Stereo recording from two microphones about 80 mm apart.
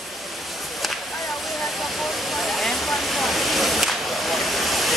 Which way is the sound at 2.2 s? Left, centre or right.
Centre.